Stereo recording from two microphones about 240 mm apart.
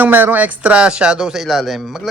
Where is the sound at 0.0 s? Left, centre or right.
Centre.